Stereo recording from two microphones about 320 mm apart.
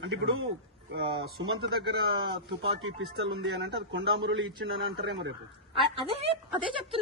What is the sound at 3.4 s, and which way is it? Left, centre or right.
A man's voice, right.